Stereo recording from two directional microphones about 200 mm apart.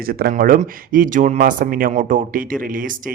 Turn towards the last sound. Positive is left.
turn(degrees=-45)  # may be behind; listen again after turning